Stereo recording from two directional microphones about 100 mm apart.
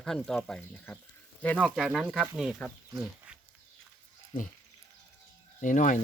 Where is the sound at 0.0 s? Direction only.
5° left (ahead or behind).